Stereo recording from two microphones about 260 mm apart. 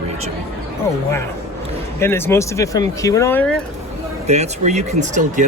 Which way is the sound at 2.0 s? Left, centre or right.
Centre.